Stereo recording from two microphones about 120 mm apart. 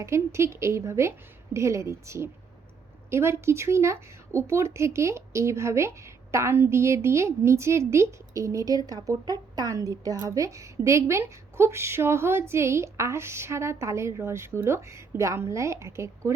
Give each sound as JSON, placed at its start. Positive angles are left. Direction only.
{"t": 0.0, "sound": "speech", "side_deg": -25}